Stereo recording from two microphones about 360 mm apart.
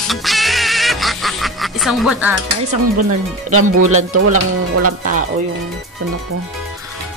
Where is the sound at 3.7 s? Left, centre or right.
Right.